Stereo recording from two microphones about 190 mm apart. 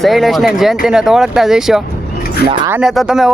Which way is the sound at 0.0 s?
Centre (ahead or behind).